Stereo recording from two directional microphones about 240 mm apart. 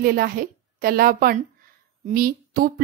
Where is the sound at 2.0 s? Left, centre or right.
Right.